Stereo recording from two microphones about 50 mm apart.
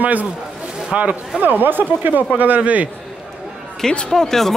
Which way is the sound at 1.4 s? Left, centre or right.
Right.